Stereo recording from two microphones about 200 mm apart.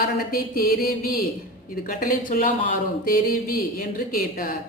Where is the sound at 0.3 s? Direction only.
45° left (ahead or behind).